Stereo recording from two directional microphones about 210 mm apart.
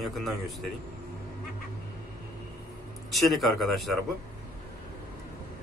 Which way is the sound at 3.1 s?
Centre (ahead or behind).